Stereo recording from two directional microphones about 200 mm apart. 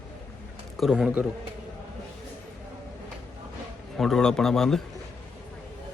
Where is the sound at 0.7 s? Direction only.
Centre (ahead or behind).